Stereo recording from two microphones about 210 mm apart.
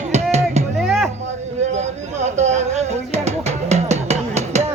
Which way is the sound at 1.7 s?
35° right (ahead or behind).